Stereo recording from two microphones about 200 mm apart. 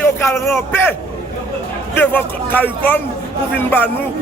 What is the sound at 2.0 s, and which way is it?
A man's voice, 10° left (ahead or behind).